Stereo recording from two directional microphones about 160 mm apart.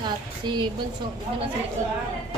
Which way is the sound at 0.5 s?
30° right (ahead or behind).